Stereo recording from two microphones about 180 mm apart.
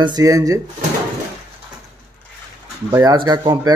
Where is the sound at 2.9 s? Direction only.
20° right (ahead or behind).